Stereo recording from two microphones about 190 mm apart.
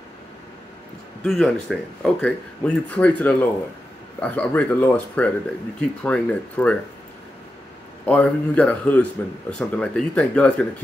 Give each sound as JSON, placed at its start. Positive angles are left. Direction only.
{"t": 1.2, "sound": "speech", "side_deg": 5}
{"t": 8.0, "sound": "speech", "side_deg": 5}